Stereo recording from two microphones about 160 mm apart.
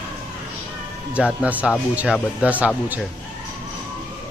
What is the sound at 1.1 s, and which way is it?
Speech, 10° right (ahead or behind).